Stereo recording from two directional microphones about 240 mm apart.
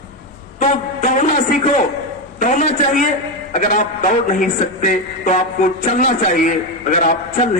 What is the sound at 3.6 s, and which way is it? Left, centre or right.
A man's voice, left.